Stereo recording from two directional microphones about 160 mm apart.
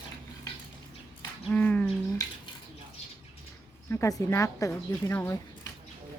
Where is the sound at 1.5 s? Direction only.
10° left (ahead or behind).